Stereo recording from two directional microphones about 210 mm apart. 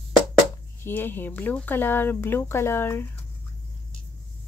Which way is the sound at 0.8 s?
10° left (ahead or behind).